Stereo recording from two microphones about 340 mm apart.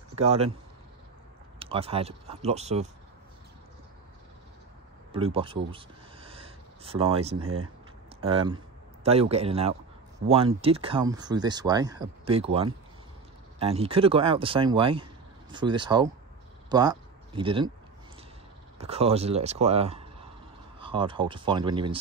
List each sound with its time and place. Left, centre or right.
0.1 s speech: centre
1.6 s speech: centre
5.1 s speech: centre
7.3 s speech: right
8.2 s speech: centre
18.8 s speech: centre